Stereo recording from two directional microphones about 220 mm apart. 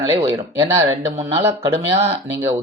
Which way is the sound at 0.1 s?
20° right (ahead or behind).